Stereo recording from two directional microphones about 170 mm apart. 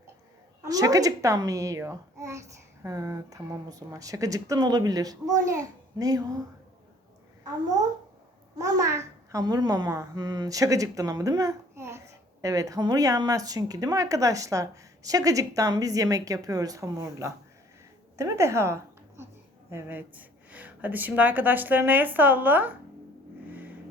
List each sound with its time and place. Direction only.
0.6 s a child's voice: 20° right (ahead or behind)
8.5 s a child's voice: 20° right (ahead or behind)